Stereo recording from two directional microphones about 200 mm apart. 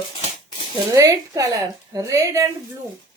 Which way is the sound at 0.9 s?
15° right (ahead or behind).